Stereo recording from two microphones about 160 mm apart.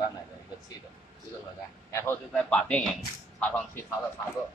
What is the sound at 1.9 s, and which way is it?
Speech, 15° left (ahead or behind).